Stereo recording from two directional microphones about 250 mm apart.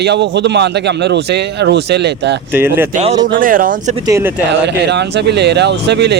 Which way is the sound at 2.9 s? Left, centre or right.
Right.